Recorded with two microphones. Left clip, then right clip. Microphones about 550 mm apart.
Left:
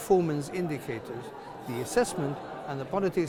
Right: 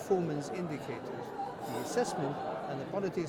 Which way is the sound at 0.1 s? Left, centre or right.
Left.